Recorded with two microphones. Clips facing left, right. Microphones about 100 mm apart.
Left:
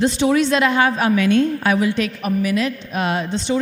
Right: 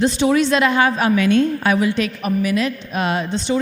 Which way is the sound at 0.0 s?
20° right (ahead or behind).